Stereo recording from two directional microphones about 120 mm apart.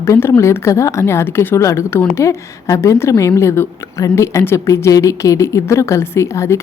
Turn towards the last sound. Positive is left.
turn(degrees=25)  # may be behind; listen again after turning